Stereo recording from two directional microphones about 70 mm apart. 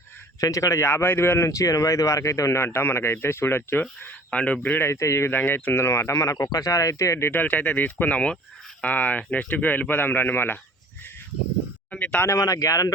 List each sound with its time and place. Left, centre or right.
0.3 s speech: left
1.5 s speech: left
4.3 s speech: centre
4.8 s speech: left
5.4 s speech: left
5.8 s speech: left
7.3 s speech: left
11.9 s a sound: centre
12.3 s speech: left